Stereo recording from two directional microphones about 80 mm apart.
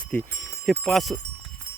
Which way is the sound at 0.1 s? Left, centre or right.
Centre.